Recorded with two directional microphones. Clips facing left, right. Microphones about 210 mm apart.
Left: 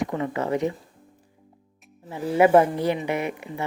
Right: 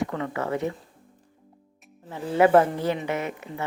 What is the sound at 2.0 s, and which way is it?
Speech, 10° left (ahead or behind).